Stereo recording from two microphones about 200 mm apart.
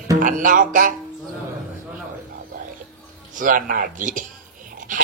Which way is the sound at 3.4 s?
40° right (ahead or behind).